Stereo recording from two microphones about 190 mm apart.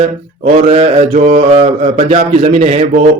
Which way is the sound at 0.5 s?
35° right (ahead or behind).